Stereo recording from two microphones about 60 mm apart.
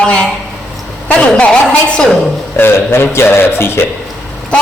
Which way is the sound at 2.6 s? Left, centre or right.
Left.